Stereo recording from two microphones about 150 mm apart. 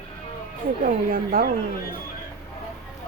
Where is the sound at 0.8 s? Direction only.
70° right (ahead or behind).